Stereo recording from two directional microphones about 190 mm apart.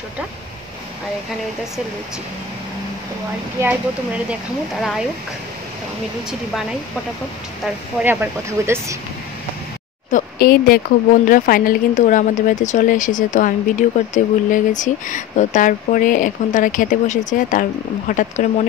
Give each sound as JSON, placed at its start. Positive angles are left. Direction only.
{"t": 4.3, "sound": "speech", "side_deg": 0}
{"t": 7.6, "sound": "speech", "side_deg": -10}
{"t": 10.1, "sound": "a woman's voice", "side_deg": 50}